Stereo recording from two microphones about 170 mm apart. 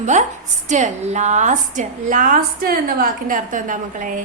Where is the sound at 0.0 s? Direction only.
45° right (ahead or behind).